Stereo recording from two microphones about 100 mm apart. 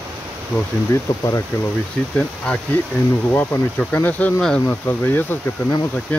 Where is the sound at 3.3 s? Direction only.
20° left (ahead or behind).